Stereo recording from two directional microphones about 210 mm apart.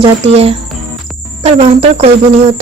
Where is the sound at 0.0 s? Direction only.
30° right (ahead or behind).